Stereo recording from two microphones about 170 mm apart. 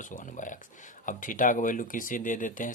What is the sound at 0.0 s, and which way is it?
Speech, 50° left (ahead or behind).